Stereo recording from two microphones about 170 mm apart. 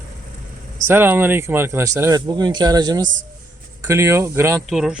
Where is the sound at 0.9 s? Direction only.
10° right (ahead or behind).